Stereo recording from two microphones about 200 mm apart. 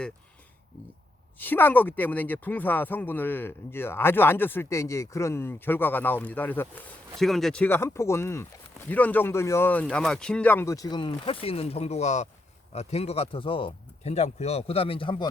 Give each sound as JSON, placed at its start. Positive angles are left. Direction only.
{"t": 1.4, "sound": "speech", "side_deg": 10}